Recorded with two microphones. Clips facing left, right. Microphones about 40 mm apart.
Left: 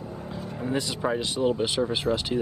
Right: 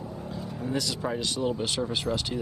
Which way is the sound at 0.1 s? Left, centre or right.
Centre.